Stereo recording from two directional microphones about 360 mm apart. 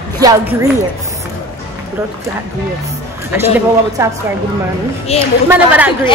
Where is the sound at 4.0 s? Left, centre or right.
Centre.